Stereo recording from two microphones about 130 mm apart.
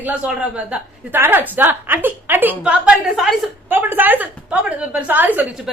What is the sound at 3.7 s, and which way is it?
A woman's voice, 15° right (ahead or behind).